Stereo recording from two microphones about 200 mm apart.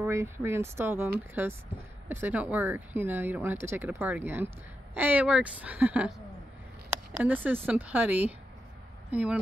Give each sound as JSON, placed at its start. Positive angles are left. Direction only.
{"t": 0.0, "sound": "speech", "side_deg": -10}
{"t": 7.2, "sound": "speech", "side_deg": -10}